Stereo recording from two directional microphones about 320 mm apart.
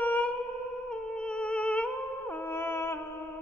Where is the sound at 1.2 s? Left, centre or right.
Centre.